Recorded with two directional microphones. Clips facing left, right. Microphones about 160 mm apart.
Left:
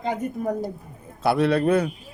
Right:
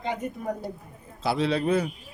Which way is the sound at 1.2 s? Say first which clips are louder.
Left 5 dB; 60° left (ahead or behind).